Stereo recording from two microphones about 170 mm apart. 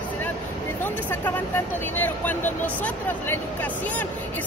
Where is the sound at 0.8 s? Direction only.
10° left (ahead or behind).